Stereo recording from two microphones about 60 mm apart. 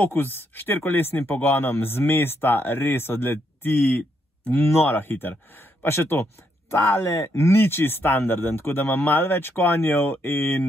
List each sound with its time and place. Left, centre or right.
0.0 s speech: left